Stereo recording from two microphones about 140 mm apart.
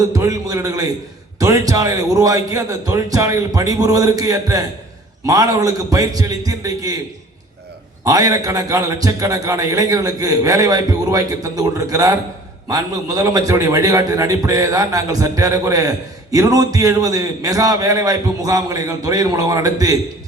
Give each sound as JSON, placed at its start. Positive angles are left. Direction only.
{"t": 0.1, "sound": "a man's voice", "side_deg": -25}
{"t": 8.0, "sound": "a man's voice", "side_deg": -25}